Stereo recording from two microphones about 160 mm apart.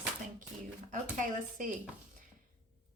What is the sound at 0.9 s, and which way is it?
Speech, 55° right (ahead or behind).